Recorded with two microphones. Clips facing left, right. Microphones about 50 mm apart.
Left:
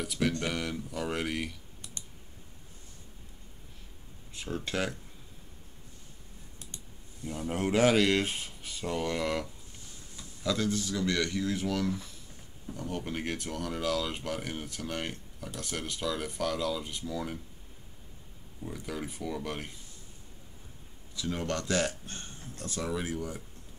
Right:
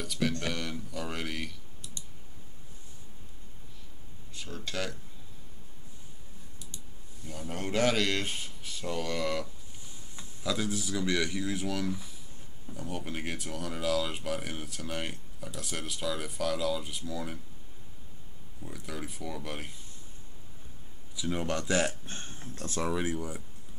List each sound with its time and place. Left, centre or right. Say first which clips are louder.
0.0 s speech: left 1 dB; centre
4.3 s speech: left 4 dB; left
7.2 s speech: left 5 dB; centre
10.4 s speech: left 2 dB; centre
18.7 s speech: left 2 dB; centre
21.1 s speech: right 1 dB; centre; by 22.9 s right
22.9 s speech: right 2 dB; centre